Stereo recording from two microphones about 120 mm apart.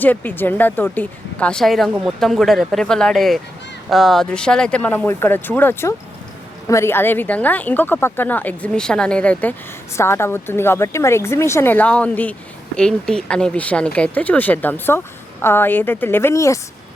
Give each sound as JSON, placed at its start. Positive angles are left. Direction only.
{"t": 0.0, "sound": "speech", "side_deg": 15}